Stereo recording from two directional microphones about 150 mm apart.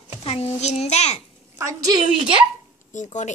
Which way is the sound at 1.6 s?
20° right (ahead or behind).